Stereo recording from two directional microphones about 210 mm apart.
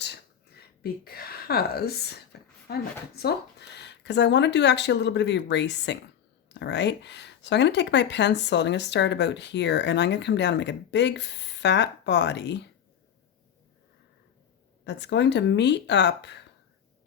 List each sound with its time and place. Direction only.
0.0 s a sound: 50° left (ahead or behind)
3.8 s speech: 55° left (ahead or behind)
14.8 s speech: 55° left (ahead or behind)